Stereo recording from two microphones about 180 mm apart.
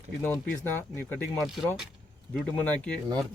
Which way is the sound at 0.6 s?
10° left (ahead or behind).